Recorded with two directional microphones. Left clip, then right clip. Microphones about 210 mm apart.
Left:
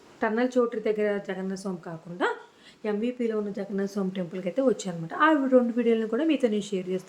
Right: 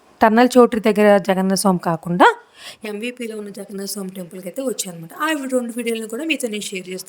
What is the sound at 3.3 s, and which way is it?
A woman's voice, centre (ahead or behind).